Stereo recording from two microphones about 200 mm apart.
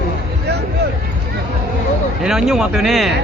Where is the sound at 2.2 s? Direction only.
Centre (ahead or behind).